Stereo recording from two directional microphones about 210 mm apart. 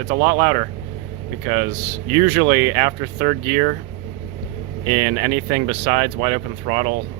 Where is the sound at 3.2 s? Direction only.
40° right (ahead or behind).